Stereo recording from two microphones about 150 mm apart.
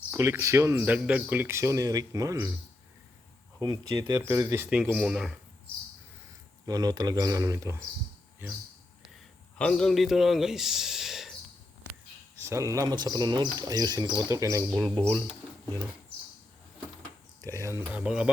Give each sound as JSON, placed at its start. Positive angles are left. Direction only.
{"t": 0.1, "sound": "speech", "side_deg": -20}
{"t": 3.6, "sound": "speech", "side_deg": -30}
{"t": 6.7, "sound": "speech", "side_deg": -25}
{"t": 9.6, "sound": "speech", "side_deg": 5}
{"t": 12.4, "sound": "speech", "side_deg": -20}
{"t": 14.7, "sound": "speech", "side_deg": 0}
{"t": 17.4, "sound": "speech", "side_deg": -20}
{"t": 18.0, "sound": "speech", "side_deg": -5}